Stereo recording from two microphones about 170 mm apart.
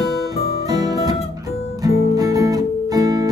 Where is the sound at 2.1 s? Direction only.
20° right (ahead or behind).